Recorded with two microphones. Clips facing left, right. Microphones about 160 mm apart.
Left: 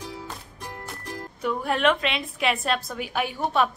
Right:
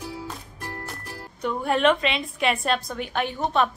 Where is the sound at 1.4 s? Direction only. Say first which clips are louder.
Right 2 dB; centre (ahead or behind).